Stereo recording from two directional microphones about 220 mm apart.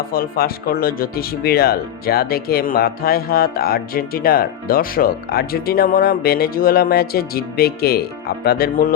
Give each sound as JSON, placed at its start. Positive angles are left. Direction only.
{"t": 0.1, "sound": "speech", "side_deg": 45}